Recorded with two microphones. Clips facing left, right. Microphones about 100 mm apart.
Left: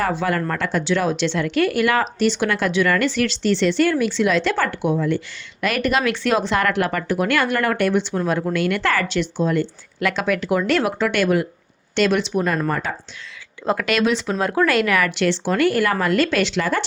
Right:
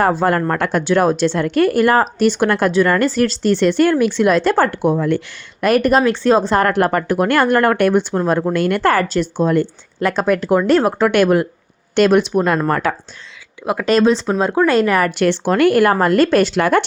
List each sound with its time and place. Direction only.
0.0 s a woman's voice: 45° right (ahead or behind)
0.6 s a woman's voice: 55° right (ahead or behind)
6.0 s a woman's voice: 30° right (ahead or behind)
10.9 s a woman's voice: 50° right (ahead or behind)
12.6 s speech: 70° right (ahead or behind)
13.8 s a woman's voice: 35° right (ahead or behind)